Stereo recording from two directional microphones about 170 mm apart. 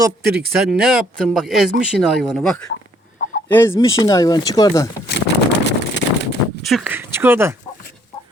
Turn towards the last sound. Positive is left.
turn(degrees=-15)  # may be behind; listen again after turning